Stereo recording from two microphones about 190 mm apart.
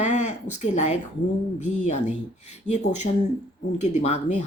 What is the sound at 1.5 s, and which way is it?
Speech, 40° left (ahead or behind).